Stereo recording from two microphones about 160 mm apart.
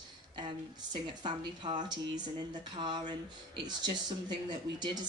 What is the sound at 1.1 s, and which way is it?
Speech, 30° right (ahead or behind).